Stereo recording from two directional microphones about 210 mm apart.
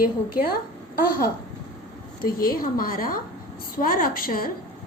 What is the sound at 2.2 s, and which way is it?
A woman's voice, 45° left (ahead or behind).